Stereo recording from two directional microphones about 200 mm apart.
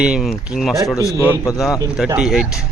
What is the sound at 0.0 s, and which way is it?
Speech, centre (ahead or behind).